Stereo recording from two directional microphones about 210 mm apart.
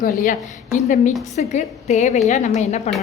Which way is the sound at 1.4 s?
35° left (ahead or behind).